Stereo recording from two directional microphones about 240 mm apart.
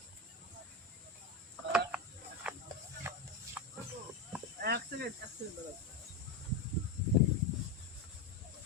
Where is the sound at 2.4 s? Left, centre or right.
Centre.